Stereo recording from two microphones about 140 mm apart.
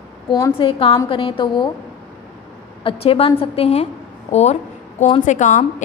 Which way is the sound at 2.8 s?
45° left (ahead or behind).